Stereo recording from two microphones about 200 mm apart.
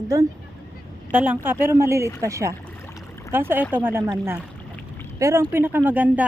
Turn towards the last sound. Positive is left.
turn(degrees=-10)  # may be behind; listen again after turning